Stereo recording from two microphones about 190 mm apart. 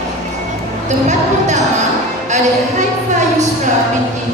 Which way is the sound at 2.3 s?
40° right (ahead or behind).